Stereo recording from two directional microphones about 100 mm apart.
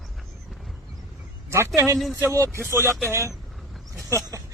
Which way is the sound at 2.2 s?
30° right (ahead or behind).